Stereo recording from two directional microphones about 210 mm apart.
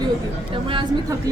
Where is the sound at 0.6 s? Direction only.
25° right (ahead or behind).